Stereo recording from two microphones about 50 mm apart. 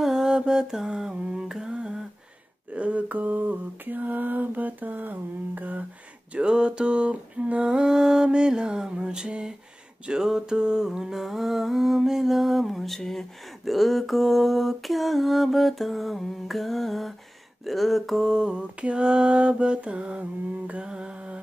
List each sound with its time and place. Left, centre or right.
0.0 s mantra: centre
1.5 s humming: centre
2.7 s mantra: right
6.3 s a sound: centre
18.2 s mantra: centre